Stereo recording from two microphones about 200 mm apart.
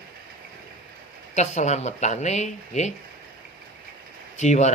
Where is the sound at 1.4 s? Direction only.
35° left (ahead or behind).